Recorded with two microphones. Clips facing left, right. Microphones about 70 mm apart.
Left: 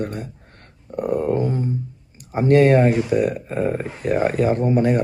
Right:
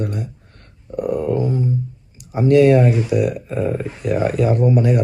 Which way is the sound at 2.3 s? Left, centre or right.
Left.